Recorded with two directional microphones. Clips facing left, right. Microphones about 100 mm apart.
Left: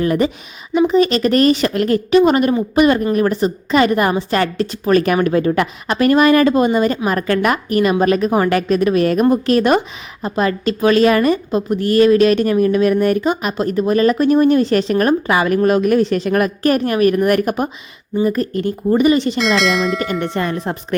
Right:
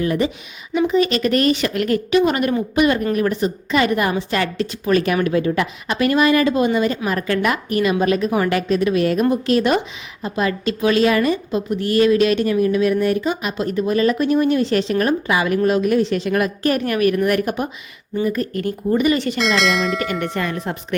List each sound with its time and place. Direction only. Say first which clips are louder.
0.0 s a woman's voice: left 3 dB; 45° left (ahead or behind)
16.8 s speech: left 2 dB; 35° left (ahead or behind)
18.2 s speech: left 4 dB; 35° left (ahead or behind)
19.4 s speech: left 3 dB; centre (ahead or behind)
20.0 s speech: left 3 dB; 30° left (ahead or behind)